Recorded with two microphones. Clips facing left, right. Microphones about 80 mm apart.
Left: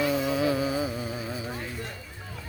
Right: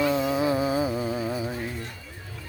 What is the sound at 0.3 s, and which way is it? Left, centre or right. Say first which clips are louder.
Music: right 2 dB; right.